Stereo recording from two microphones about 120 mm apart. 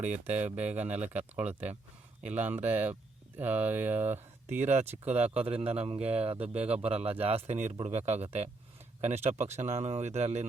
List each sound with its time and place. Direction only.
0.5 s speech: 15° right (ahead or behind)
4.6 s a man's voice: 65° right (ahead or behind)